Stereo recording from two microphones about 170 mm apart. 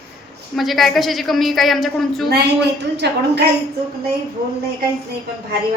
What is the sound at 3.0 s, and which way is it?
Speech, 85° right.